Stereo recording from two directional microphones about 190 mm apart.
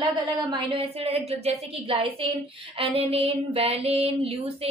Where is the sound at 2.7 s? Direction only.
30° right (ahead or behind).